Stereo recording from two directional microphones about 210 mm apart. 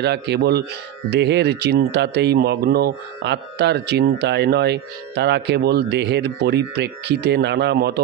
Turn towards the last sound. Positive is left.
turn(degrees=-50)  # may be behind; listen again after turning